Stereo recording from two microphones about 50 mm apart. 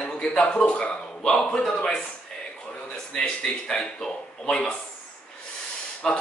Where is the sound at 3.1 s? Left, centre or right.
Centre.